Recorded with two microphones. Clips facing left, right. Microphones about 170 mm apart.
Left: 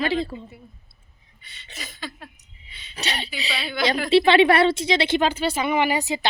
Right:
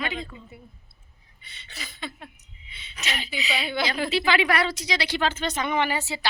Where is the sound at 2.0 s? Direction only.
20° right (ahead or behind).